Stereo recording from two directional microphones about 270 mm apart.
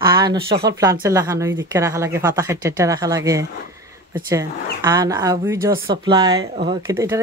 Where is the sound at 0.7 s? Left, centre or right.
Centre.